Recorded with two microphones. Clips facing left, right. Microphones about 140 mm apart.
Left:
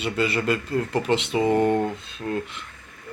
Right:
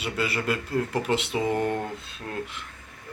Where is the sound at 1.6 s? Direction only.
20° left (ahead or behind).